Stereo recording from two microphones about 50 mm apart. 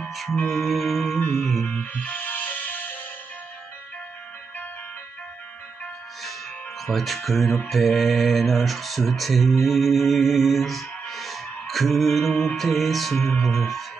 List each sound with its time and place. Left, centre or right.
0.1 s music: centre
0.5 s speech: centre
1.7 s music: left
6.9 s speech: centre